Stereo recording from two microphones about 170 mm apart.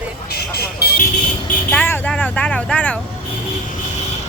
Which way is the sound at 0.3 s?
70° left (ahead or behind).